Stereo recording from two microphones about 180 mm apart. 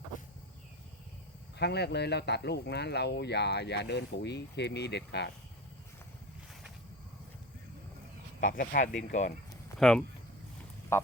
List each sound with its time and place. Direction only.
1.5 s speech: 65° left (ahead or behind)
8.4 s speech: 50° left (ahead or behind)
9.8 s speech: centre (ahead or behind)
10.9 s a sound: 15° left (ahead or behind)